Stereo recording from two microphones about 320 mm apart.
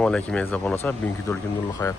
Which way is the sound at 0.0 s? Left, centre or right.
Centre.